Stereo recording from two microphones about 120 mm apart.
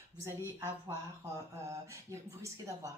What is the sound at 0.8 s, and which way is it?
Speech, 25° right (ahead or behind).